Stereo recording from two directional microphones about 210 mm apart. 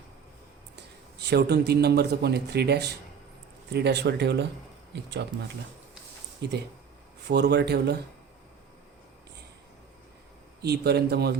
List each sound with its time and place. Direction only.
1.2 s speech: 50° right (ahead or behind)
6.4 s speech: 55° right (ahead or behind)
10.6 s speech: 50° right (ahead or behind)